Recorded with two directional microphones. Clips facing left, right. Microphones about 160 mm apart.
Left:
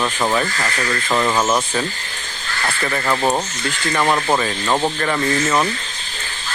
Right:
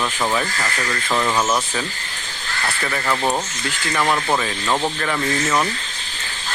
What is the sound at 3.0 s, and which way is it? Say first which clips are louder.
Speech: left 2 dB; 15° left (ahead or behind).